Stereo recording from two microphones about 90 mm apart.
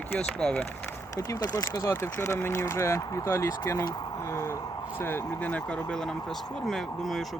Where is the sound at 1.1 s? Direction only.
40° left (ahead or behind).